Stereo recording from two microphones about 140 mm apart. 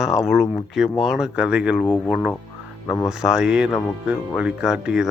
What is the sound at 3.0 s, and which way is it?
Speech, 5° right (ahead or behind).